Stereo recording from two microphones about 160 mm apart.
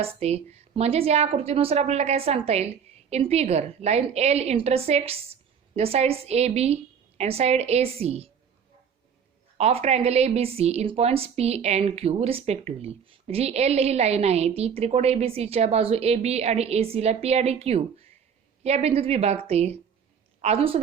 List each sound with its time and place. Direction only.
0.0 s a woman's voice: 40° right (ahead or behind)
9.6 s a woman's voice: 40° right (ahead or behind)